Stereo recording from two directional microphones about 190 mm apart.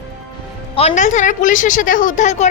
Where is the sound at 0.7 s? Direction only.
35° left (ahead or behind).